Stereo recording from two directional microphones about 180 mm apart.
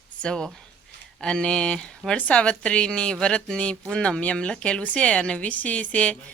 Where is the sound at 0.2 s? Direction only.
5° left (ahead or behind).